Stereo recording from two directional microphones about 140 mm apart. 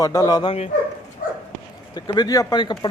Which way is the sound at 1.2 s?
70° left (ahead or behind).